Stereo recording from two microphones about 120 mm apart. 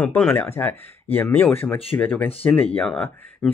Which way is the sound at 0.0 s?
10° left (ahead or behind).